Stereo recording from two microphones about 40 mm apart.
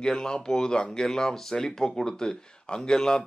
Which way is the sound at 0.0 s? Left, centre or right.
Centre.